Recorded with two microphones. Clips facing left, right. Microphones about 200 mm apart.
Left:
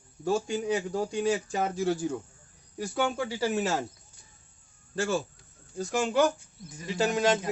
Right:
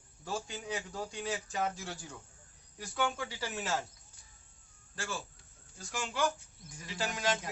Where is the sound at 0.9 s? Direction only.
40° left (ahead or behind).